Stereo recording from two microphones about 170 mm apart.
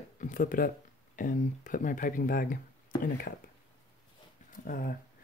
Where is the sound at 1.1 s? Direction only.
50° left (ahead or behind).